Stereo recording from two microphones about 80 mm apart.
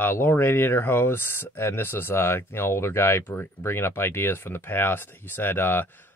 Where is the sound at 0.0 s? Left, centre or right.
Left.